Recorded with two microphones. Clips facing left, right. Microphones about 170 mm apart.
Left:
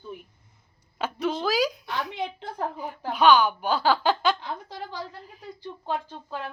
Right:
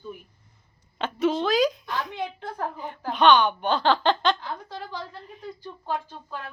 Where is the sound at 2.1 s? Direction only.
20° left (ahead or behind).